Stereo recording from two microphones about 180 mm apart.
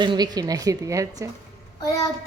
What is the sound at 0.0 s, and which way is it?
A woman's voice, 25° right (ahead or behind).